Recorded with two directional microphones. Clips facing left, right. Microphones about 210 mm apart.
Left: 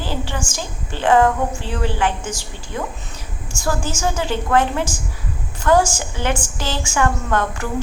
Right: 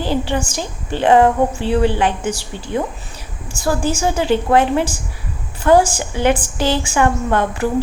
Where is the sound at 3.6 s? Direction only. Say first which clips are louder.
Right 4 dB; 35° right (ahead or behind).